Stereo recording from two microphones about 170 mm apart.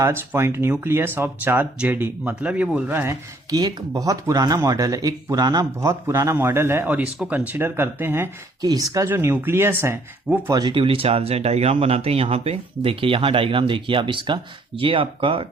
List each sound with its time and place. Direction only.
0.0 s speech: 15° right (ahead or behind)
10.5 s speech: 25° right (ahead or behind)